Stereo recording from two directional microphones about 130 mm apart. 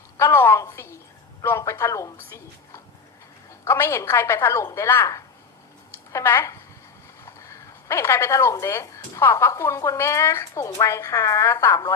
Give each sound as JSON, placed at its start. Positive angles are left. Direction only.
{"t": 0.2, "sound": "a woman's voice", "side_deg": 20}
{"t": 7.3, "sound": "a sound", "side_deg": 25}
{"t": 8.6, "sound": "speech", "side_deg": 20}